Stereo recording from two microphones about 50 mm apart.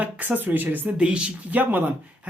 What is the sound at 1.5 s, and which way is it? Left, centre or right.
Speech, right.